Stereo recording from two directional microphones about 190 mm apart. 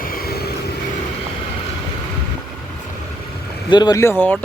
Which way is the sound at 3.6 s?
20° left (ahead or behind).